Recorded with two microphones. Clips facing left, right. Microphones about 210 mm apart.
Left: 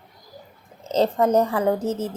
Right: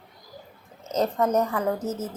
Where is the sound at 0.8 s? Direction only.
30° left (ahead or behind).